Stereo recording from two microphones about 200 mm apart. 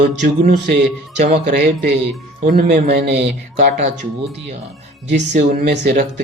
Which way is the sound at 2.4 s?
40° right (ahead or behind).